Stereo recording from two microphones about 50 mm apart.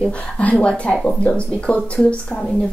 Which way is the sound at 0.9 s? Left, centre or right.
Centre.